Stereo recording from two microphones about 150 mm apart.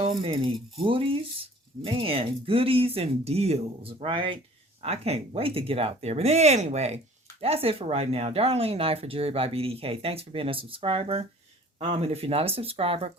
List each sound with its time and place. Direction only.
0.0 s speech: 35° right (ahead or behind)